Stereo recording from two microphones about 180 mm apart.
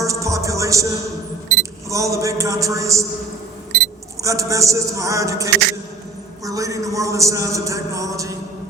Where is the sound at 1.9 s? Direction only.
15° right (ahead or behind).